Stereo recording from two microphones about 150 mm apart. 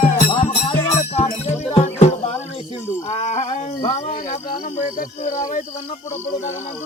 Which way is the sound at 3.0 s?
45° left (ahead or behind).